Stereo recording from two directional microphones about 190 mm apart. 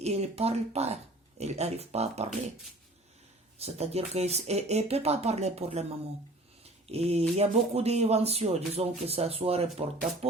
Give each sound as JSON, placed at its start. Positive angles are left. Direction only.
{"t": 0.0, "sound": "speech", "side_deg": -35}
{"t": 3.6, "sound": "speech", "side_deg": -35}
{"t": 6.8, "sound": "speech", "side_deg": -35}